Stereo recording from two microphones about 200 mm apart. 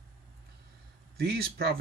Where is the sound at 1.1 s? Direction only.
50° right (ahead or behind).